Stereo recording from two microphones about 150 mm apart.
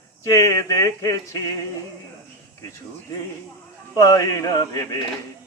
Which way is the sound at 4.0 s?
20° left (ahead or behind).